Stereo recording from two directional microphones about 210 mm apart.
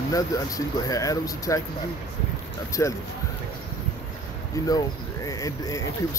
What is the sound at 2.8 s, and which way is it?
Speech, 15° left (ahead or behind).